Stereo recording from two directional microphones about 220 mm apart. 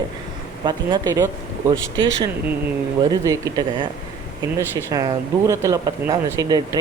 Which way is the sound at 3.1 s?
15° right (ahead or behind).